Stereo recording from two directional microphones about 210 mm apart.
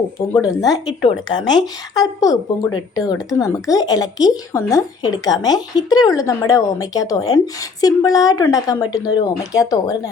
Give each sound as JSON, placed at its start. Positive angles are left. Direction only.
{"t": 0.6, "sound": "a woman's voice", "side_deg": 20}